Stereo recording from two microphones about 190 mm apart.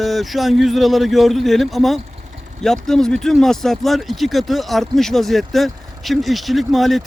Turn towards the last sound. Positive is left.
turn(degrees=0)  # may be behind; listen again after turning